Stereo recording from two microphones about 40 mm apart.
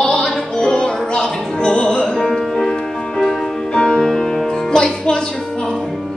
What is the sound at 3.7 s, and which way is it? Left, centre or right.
Music, centre.